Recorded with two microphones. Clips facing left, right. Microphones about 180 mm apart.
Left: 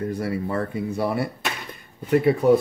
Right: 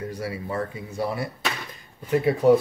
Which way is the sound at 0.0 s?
55° left (ahead or behind).